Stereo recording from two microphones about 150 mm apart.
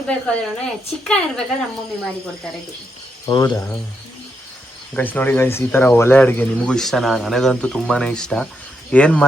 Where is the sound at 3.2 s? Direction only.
25° left (ahead or behind).